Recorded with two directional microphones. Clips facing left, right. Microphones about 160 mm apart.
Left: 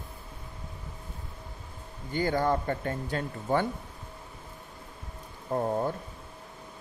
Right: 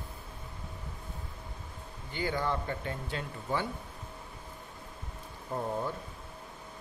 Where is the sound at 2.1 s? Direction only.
45° left (ahead or behind).